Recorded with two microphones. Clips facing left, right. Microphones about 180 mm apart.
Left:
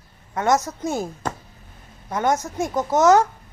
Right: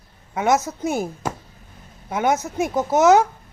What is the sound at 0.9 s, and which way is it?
A woman's voice, 20° right (ahead or behind).